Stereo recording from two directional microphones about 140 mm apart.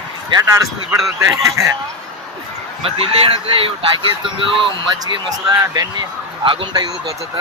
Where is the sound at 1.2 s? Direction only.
25° right (ahead or behind).